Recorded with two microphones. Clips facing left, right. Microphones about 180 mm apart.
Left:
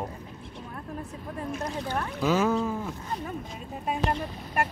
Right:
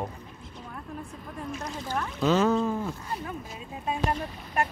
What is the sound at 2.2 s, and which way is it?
Speech, 10° left (ahead or behind).